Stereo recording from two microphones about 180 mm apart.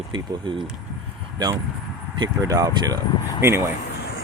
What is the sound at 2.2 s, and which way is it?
Speech, 20° right (ahead or behind).